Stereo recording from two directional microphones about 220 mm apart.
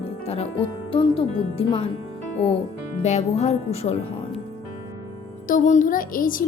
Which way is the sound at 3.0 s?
30° left (ahead or behind).